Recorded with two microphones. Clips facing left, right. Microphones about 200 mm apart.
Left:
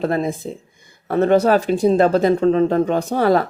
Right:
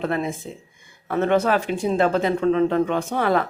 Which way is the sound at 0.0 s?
35° left (ahead or behind).